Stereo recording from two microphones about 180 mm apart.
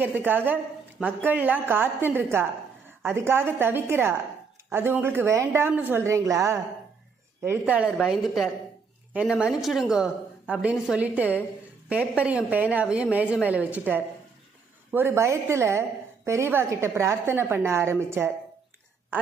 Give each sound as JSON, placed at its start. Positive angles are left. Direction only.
{"t": 0.0, "sound": "a woman's voice", "side_deg": -10}